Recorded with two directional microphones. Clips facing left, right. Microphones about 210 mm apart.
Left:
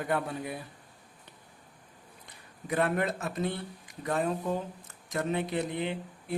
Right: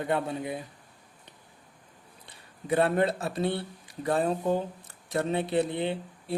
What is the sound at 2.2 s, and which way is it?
Speech, 30° right (ahead or behind).